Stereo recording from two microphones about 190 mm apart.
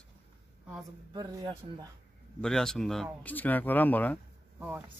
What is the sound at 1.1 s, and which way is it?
Speech, 20° right (ahead or behind).